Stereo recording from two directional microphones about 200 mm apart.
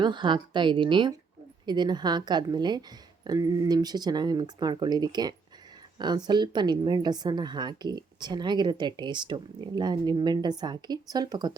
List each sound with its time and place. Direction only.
0.0 s a woman's voice: 25° right (ahead or behind)